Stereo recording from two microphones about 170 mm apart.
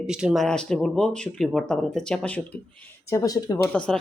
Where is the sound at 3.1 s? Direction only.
20° left (ahead or behind).